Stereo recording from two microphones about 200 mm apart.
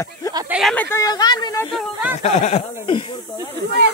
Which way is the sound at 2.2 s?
35° left (ahead or behind).